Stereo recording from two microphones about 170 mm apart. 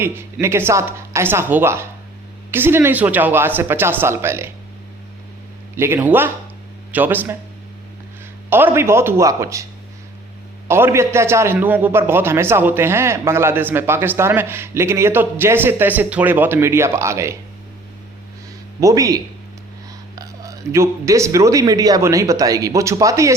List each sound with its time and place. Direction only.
0.0 s a man's voice: 15° right (ahead or behind)
5.7 s a man's voice: 15° right (ahead or behind)
8.4 s a man's voice: 15° right (ahead or behind)
10.7 s a man's voice: 15° right (ahead or behind)
18.8 s speech: 20° right (ahead or behind)